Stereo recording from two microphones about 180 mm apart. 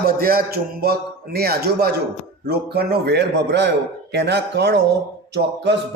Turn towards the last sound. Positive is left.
turn(degrees=-70)  # may be behind; listen again after turning